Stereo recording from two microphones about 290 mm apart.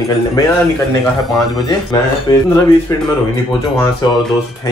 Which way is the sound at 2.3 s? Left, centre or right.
Centre.